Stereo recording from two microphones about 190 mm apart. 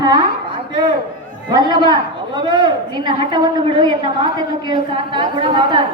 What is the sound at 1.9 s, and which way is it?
A woman's voice, 25° right (ahead or behind).